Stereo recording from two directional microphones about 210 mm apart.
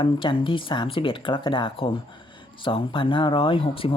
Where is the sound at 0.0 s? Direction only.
25° left (ahead or behind).